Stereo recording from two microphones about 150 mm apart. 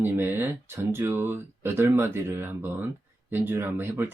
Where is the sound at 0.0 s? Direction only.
15° right (ahead or behind).